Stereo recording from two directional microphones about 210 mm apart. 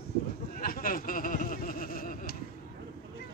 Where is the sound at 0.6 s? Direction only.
40° left (ahead or behind).